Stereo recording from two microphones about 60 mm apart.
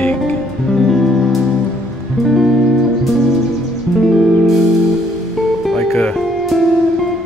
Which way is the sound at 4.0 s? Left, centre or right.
Centre.